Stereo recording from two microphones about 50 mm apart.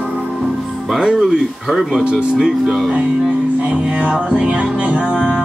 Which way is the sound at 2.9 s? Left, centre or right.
Right.